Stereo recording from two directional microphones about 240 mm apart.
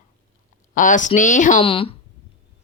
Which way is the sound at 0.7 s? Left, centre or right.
Left.